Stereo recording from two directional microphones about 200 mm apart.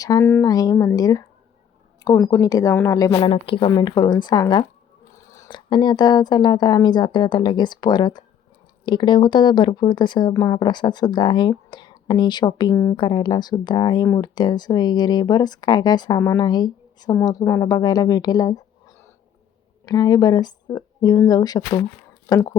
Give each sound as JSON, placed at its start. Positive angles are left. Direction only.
{"t": 0.0, "sound": "a woman's voice", "side_deg": 15}
{"t": 19.8, "sound": "speech", "side_deg": 20}